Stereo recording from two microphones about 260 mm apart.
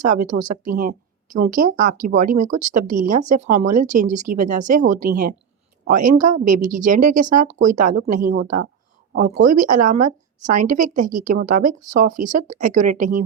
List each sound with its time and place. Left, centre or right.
0.3 s speech: right